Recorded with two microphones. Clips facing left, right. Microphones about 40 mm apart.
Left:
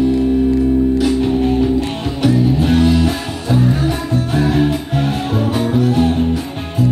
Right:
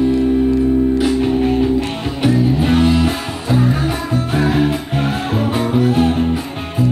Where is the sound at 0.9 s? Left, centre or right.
Centre.